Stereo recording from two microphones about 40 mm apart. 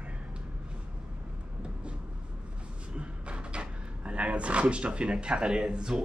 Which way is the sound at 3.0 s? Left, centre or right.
Right.